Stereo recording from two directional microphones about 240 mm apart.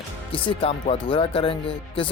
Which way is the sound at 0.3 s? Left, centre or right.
Left.